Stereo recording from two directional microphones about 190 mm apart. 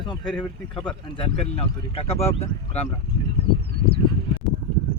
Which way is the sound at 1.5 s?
30° left (ahead or behind).